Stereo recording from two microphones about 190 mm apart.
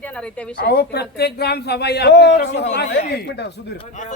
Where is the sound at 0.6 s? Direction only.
60° left (ahead or behind).